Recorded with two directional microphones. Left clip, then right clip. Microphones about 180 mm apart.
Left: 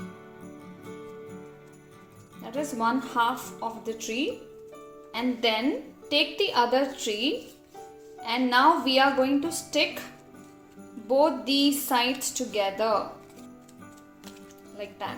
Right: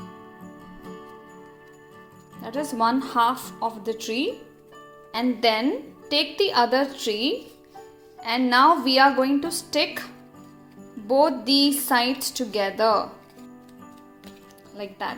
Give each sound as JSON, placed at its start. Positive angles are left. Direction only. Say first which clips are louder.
{"t": 2.4, "sound": "a woman's voice", "louder": "right 4 dB", "side_deg": -35}
{"t": 14.8, "sound": "a woman's voice", "louder": "right 4 dB", "side_deg": -35}